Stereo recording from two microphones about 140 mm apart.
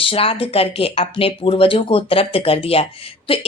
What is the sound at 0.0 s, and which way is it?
Speech, 40° left (ahead or behind).